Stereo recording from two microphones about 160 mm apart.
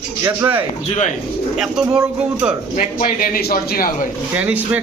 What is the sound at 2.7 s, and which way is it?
A man's voice, 50° left (ahead or behind).